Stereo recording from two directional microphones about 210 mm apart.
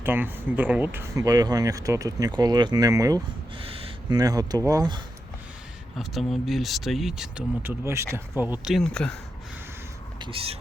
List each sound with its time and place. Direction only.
0.0 s speech: 10° right (ahead or behind)
6.0 s speech: centre (ahead or behind)
10.2 s speech: 25° right (ahead or behind)